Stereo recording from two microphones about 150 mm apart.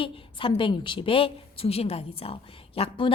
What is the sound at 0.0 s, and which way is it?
A woman's voice, 35° left (ahead or behind).